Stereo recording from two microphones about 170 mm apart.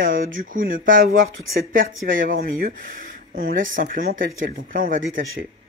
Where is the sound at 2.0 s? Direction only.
50° right (ahead or behind).